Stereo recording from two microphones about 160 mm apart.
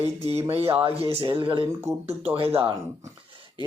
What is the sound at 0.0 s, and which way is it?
Speech, 40° right (ahead or behind).